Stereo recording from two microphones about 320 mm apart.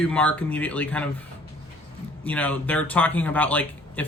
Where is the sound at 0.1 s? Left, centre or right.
Centre.